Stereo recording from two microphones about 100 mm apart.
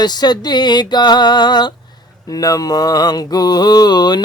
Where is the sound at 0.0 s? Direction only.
45° left (ahead or behind).